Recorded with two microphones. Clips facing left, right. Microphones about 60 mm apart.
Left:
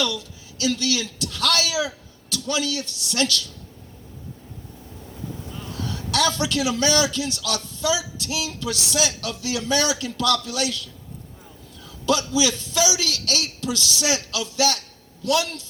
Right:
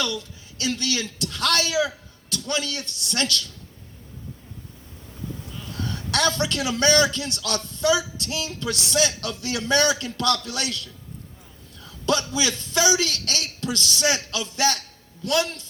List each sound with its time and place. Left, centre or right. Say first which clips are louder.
0.0 s a man's voice: left 2 dB; right
5.5 s a sound: left 2 dB; left
5.7 s a man's voice: left 1 dB; right
12.0 s a man's voice: left 2 dB; right